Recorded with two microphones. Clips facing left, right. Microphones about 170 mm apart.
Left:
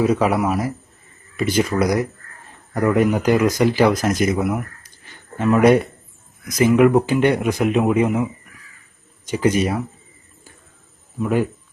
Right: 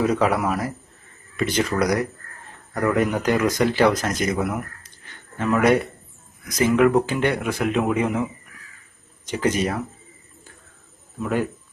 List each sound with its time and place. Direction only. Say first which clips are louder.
0.0 s speech: left 3 dB; 10° left (ahead or behind)
5.5 s a man's voice: left 4 dB; 25° left (ahead or behind)
9.2 s speech: left 4 dB; 10° left (ahead or behind)
11.2 s speech: left 4 dB; 10° left (ahead or behind)